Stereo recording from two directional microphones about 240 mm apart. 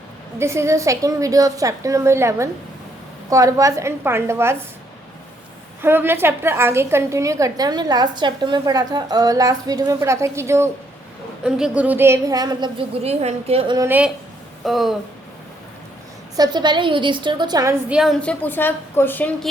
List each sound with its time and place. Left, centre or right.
0.3 s a woman's voice: centre
5.8 s a woman's voice: centre
13.8 s a woman's voice: centre
16.4 s a woman's voice: centre